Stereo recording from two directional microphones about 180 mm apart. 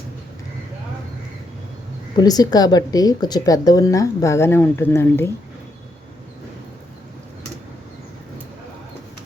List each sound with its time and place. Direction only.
2.1 s speech: 20° left (ahead or behind)